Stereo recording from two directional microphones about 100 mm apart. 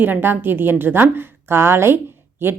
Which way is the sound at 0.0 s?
20° right (ahead or behind).